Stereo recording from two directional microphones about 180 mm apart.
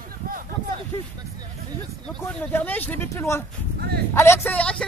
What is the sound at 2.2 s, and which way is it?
Speech, 10° left (ahead or behind).